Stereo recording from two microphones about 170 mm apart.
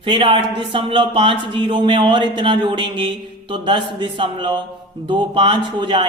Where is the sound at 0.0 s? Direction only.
30° right (ahead or behind).